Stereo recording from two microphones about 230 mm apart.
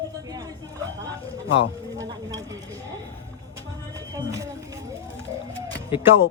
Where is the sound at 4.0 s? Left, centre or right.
Centre.